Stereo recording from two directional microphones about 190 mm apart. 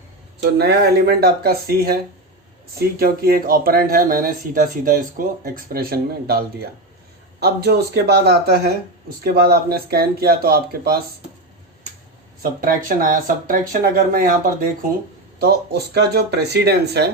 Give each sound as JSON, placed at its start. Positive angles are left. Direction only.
{"t": 0.6, "sound": "speech", "side_deg": -60}
{"t": 3.0, "sound": "speech", "side_deg": -55}
{"t": 12.4, "sound": "speech", "side_deg": -45}
{"t": 15.4, "sound": "speech", "side_deg": -55}